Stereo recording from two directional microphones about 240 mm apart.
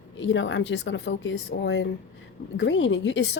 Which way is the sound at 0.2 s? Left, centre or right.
Left.